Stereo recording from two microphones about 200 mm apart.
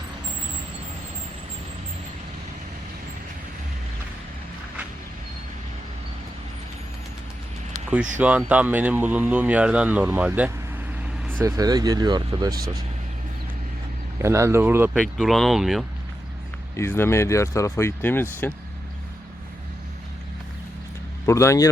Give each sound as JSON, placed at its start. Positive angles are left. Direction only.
{"t": 8.2, "sound": "speech", "side_deg": -5}
{"t": 14.2, "sound": "speech", "side_deg": -15}
{"t": 15.2, "sound": "speech", "side_deg": 0}
{"t": 16.7, "sound": "speech", "side_deg": 10}
{"t": 21.2, "sound": "speech", "side_deg": 15}